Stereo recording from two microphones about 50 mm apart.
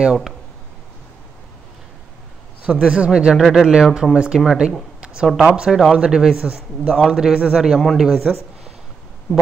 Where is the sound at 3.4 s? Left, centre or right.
Centre.